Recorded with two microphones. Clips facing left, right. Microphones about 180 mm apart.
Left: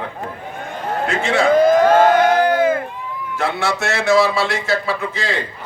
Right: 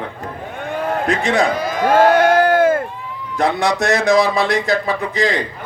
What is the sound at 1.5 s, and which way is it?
Speech, 50° left (ahead or behind).